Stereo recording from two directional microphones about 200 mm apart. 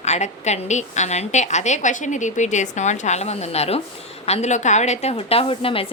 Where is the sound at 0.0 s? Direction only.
35° left (ahead or behind).